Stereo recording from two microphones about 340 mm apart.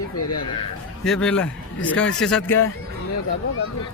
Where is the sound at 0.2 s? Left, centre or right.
Left.